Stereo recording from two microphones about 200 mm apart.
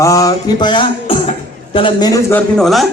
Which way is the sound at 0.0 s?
15° left (ahead or behind).